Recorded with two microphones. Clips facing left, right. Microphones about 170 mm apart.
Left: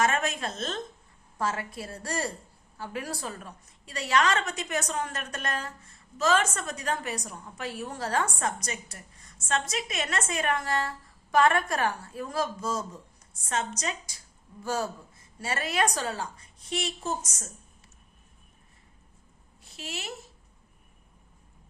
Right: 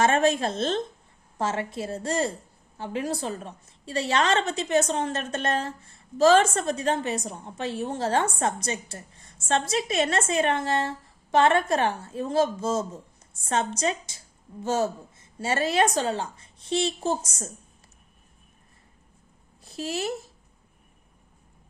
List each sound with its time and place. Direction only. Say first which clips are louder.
0.0 s a woman's voice: right 6 dB; 30° right (ahead or behind)
19.6 s a woman's voice: right 10 dB; 35° right (ahead or behind)